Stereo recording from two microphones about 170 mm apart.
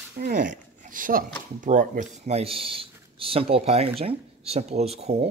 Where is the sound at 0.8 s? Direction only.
55° right (ahead or behind).